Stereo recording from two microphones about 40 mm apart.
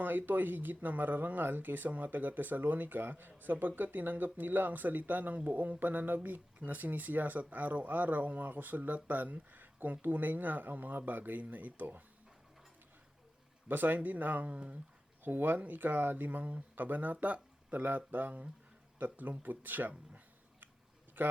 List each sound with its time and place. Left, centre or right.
0.0 s speech: right
13.7 s speech: right
14.5 s speech: right
15.2 s speech: right
17.8 s speech: right
21.2 s a man's voice: right